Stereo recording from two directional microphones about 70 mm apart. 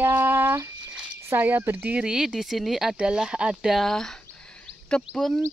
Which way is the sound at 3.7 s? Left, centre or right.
Centre.